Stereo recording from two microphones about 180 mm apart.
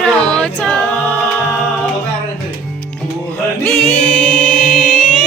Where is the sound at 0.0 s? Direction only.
5° left (ahead or behind).